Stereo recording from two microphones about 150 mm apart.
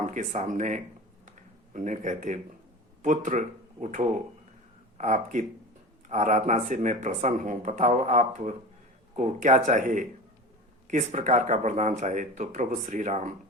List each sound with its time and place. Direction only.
0.0 s speech: 55° right (ahead or behind)